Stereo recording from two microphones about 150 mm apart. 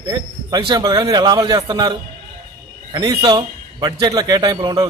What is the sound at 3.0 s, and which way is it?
A man's voice, 30° right (ahead or behind).